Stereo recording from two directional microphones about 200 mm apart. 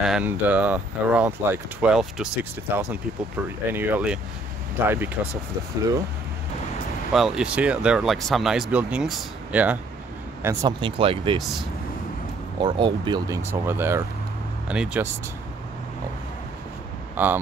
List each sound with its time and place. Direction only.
0.0 s speech: 5° right (ahead or behind)
7.2 s speech: 5° right (ahead or behind)
10.8 s speech: 25° right (ahead or behind)
13.5 s speech: 10° right (ahead or behind)
17.2 s speech: 5° right (ahead or behind)